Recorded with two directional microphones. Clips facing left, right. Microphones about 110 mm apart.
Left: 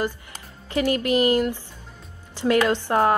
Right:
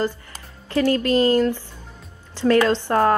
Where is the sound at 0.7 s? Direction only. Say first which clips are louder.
Right 3 dB; 15° left (ahead or behind).